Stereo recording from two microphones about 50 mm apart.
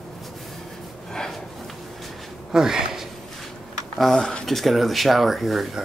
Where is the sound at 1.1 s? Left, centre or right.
Centre.